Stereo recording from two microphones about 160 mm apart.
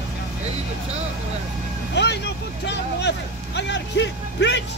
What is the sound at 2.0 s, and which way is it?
Speech, 90° left.